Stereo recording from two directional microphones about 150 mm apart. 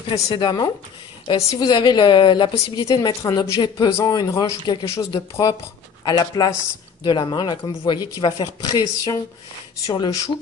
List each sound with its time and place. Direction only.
0.1 s a woman's voice: 30° left (ahead or behind)